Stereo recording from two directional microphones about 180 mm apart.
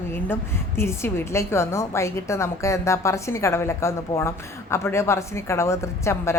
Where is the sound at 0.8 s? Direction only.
15° left (ahead or behind).